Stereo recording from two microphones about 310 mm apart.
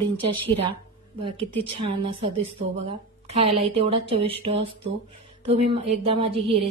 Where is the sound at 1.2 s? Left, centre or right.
Centre.